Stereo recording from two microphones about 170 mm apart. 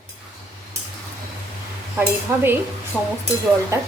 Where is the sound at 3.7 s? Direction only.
15° right (ahead or behind).